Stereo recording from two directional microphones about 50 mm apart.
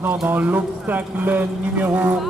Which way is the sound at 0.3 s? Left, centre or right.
Right.